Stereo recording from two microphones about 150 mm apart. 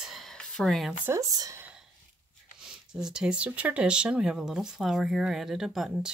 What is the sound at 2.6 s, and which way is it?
Speech, 5° right (ahead or behind).